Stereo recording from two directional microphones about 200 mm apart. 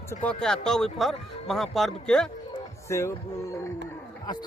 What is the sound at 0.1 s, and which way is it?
Speech, 5° left (ahead or behind).